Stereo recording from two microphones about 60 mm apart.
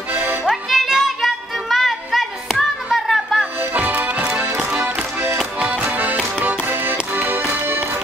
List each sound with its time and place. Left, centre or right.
0.1 s music: right
0.5 s music: centre
3.7 s music: right
5.6 s music: centre; by 8.0 s right